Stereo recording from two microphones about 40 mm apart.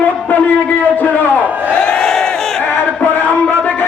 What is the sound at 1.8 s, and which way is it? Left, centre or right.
Crowd, left.